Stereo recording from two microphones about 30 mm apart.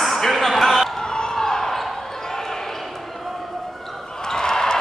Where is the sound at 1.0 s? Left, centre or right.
Left.